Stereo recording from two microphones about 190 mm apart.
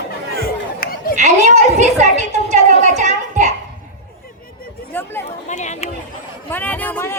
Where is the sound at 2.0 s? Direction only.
40° right (ahead or behind).